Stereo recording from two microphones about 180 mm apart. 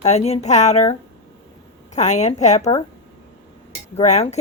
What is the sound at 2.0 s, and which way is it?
Speech, 40° left (ahead or behind).